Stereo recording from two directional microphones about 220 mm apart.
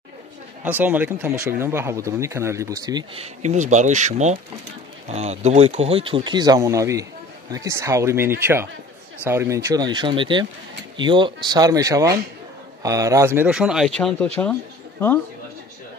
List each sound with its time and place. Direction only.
0.7 s speech: 10° right (ahead or behind)
3.4 s speech: 35° right (ahead or behind); by 15.1 s 10° left (ahead or behind)